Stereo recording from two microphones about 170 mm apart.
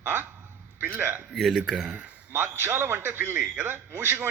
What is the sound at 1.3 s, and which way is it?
Speech, centre (ahead or behind).